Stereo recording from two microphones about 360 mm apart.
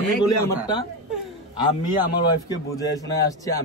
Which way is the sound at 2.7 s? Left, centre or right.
Centre.